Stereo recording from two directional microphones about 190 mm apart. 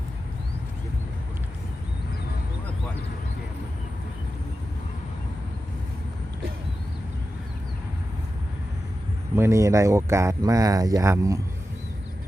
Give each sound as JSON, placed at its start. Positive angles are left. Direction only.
{"t": 9.3, "sound": "speech", "side_deg": -15}